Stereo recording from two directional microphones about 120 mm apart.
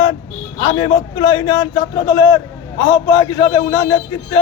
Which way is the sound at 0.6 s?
40° left (ahead or behind).